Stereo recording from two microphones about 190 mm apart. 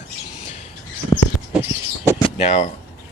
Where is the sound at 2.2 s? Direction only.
35° left (ahead or behind).